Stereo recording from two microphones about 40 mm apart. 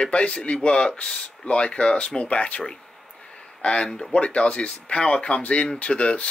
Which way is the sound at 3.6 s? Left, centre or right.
Left.